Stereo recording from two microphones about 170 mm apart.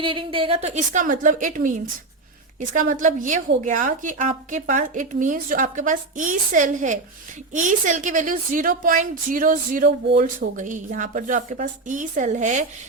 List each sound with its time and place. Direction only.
0.0 s a woman's voice: 30° right (ahead or behind); by 12.6 s 45° right (ahead or behind)